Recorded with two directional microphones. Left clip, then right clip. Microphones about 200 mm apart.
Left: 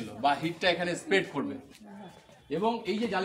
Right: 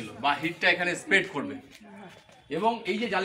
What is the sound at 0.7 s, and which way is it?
Speech, 25° left (ahead or behind).